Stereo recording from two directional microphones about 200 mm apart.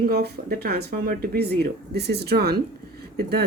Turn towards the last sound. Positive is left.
turn(degrees=-55)  # may be behind; listen again after turning